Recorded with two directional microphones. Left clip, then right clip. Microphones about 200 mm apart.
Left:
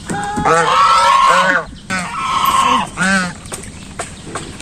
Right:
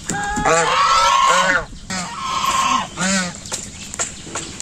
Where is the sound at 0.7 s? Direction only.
Centre (ahead or behind).